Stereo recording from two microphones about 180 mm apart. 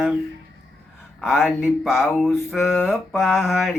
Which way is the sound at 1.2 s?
Centre (ahead or behind).